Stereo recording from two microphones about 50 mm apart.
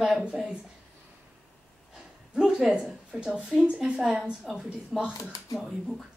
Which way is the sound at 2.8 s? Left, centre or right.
Centre.